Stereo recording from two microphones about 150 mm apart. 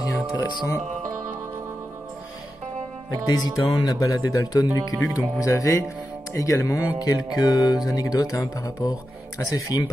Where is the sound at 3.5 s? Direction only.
20° left (ahead or behind).